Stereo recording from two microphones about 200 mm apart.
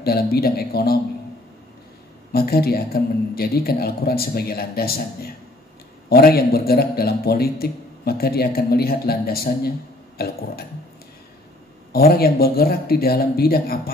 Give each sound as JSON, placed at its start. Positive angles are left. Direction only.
{"t": 0.0, "sound": "a man's voice", "side_deg": 50}
{"t": 2.3, "sound": "a man's voice", "side_deg": 50}
{"t": 11.9, "sound": "a man's voice", "side_deg": 50}